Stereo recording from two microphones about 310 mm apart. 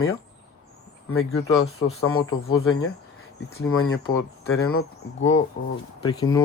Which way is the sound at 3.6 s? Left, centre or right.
Left.